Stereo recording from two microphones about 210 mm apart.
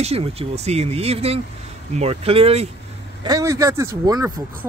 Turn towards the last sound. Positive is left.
turn(degrees=-15)  # may be behind; listen again after turning